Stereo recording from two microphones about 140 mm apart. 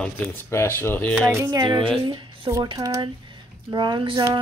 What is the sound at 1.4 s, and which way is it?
Speech, 30° right (ahead or behind).